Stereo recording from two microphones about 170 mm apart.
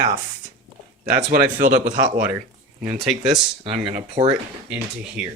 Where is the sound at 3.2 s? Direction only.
35° right (ahead or behind).